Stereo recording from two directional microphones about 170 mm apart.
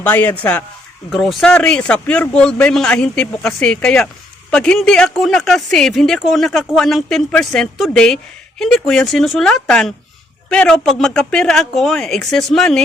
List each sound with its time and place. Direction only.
0.0 s a man's voice: 10° left (ahead or behind)